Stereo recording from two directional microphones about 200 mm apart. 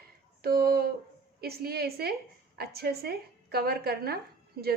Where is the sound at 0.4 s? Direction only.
50° right (ahead or behind).